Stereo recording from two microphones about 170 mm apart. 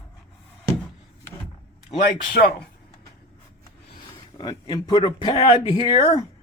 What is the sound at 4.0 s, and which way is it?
Speech, 25° left (ahead or behind).